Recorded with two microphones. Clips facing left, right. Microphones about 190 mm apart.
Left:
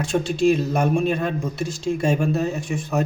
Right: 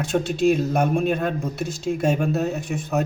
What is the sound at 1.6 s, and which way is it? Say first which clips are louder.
Speech: left 1 dB; 60° right (ahead or behind).